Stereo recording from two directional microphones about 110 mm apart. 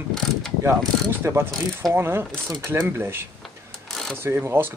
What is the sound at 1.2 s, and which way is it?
Speech, 25° right (ahead or behind).